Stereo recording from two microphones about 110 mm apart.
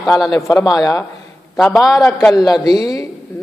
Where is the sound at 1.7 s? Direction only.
5° right (ahead or behind).